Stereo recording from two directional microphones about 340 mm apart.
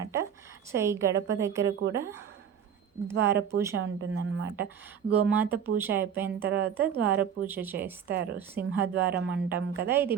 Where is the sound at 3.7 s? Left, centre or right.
Right.